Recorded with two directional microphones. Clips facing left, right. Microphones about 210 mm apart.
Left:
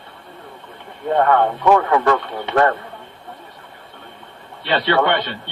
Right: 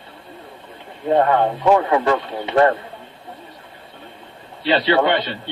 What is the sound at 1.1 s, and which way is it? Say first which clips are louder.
Speech: even; 25° right (ahead or behind).